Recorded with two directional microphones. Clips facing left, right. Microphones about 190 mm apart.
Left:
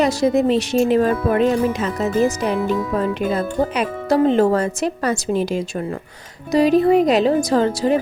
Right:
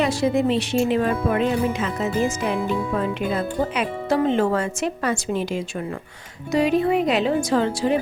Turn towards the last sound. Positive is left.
turn(degrees=40)  # may be behind; listen again after turning